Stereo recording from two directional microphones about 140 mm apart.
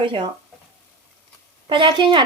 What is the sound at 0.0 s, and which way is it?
Speech, 35° right (ahead or behind).